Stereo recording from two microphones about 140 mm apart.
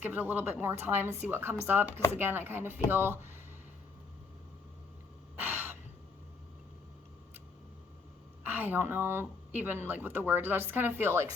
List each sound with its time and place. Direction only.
0.0 s speech: 15° right (ahead or behind)
5.4 s gasp: 15° right (ahead or behind)
8.4 s speech: 15° right (ahead or behind)